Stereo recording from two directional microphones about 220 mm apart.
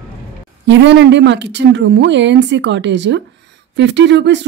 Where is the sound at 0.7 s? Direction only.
55° right (ahead or behind).